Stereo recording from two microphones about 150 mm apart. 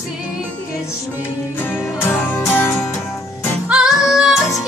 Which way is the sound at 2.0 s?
15° left (ahead or behind).